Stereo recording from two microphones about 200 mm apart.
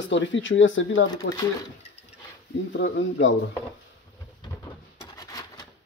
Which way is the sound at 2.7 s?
65° left (ahead or behind).